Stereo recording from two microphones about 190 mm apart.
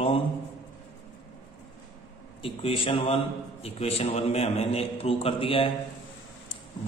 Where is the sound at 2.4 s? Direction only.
30° left (ahead or behind).